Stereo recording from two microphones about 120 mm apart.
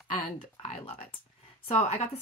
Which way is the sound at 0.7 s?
55° left (ahead or behind).